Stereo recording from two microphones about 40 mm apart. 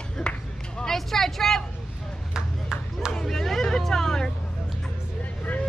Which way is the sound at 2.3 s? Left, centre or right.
Centre.